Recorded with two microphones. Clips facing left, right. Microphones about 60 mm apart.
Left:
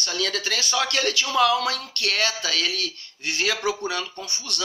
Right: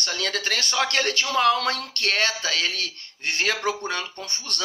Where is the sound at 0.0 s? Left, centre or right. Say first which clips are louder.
Even; right.